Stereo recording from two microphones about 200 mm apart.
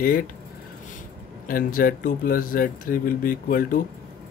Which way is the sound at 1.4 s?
45° left (ahead or behind).